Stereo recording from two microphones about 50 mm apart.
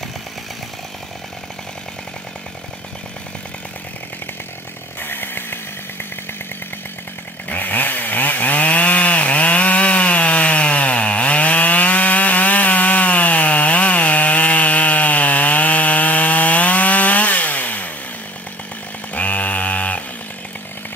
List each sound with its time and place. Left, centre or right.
5.0 s chainsaw: left
7.4 s chainsaw: left
19.1 s a sound: left